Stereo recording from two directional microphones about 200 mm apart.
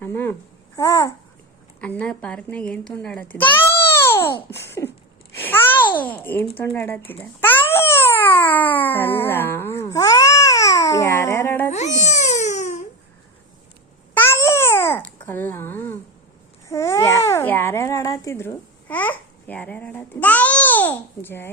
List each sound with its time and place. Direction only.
0.0 s a child's voice: 10° left (ahead or behind)
5.3 s babbling: 10° left (ahead or behind)
6.7 s a child's voice: 10° left (ahead or behind)
7.1 s babbling: 10° left (ahead or behind)
11.7 s babbling: 35° left (ahead or behind)
14.1 s babbling: 10° left (ahead or behind)